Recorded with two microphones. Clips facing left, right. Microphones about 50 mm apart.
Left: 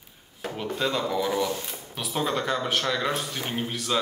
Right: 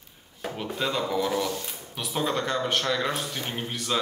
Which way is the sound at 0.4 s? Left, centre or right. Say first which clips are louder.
Left 2 dB; centre.